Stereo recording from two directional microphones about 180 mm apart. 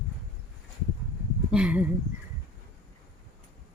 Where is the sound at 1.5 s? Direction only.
5° right (ahead or behind).